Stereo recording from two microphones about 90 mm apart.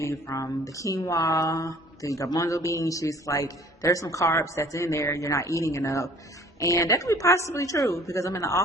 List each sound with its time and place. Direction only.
0.3 s speech: 40° left (ahead or behind)